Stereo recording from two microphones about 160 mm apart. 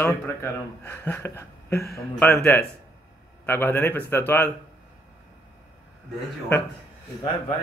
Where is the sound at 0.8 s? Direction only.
10° left (ahead or behind).